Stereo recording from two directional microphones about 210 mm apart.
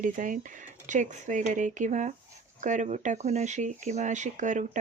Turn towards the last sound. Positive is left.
turn(degrees=-35)  # may be behind; listen again after turning